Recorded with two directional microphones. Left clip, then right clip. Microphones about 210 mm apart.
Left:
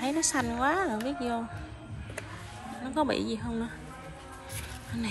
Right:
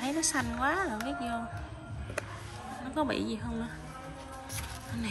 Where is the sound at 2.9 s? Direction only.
15° right (ahead or behind).